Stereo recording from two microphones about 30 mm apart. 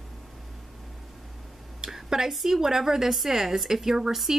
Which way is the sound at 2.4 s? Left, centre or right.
Centre.